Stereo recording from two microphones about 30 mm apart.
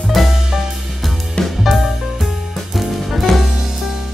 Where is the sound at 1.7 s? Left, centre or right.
Centre.